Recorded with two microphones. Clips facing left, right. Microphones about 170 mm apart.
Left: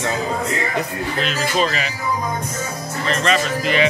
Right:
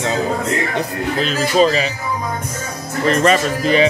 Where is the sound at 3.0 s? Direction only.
45° right (ahead or behind).